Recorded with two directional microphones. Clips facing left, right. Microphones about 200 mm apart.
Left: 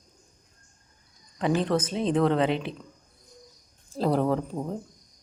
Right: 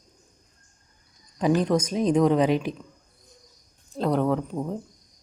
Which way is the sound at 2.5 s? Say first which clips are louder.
Right 4 dB; 25° left (ahead or behind).